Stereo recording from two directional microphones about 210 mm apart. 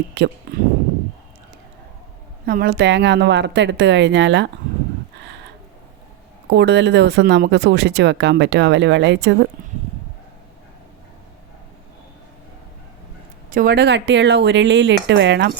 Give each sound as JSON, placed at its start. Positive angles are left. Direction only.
{"t": 0.2, "sound": "speech", "side_deg": -55}
{"t": 2.5, "sound": "speech", "side_deg": -45}
{"t": 6.5, "sound": "speech", "side_deg": -55}
{"t": 13.5, "sound": "speech", "side_deg": -45}